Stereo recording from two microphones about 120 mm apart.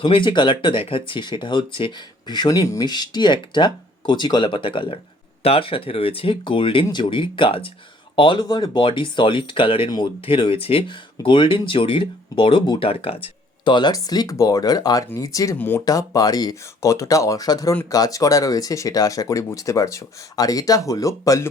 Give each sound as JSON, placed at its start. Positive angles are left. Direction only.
{"t": 0.0, "sound": "speech", "side_deg": 45}
{"t": 13.2, "sound": "speech", "side_deg": 40}
{"t": 15.5, "sound": "speech", "side_deg": 15}
{"t": 15.8, "sound": "speech", "side_deg": 30}